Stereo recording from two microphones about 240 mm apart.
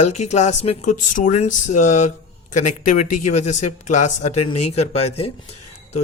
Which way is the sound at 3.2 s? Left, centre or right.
Left.